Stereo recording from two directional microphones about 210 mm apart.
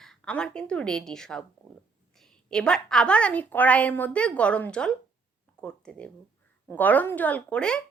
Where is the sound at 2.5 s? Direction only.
5° left (ahead or behind).